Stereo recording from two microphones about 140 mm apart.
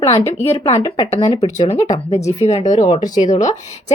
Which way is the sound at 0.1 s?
50° left (ahead or behind).